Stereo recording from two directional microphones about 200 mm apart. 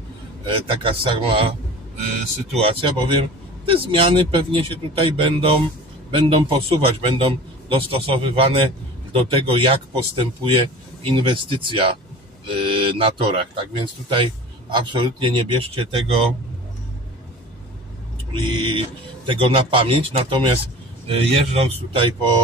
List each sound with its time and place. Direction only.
0.7 s speech: 25° right (ahead or behind)
2.6 s speech: 25° right (ahead or behind)
18.3 s speech: 25° right (ahead or behind)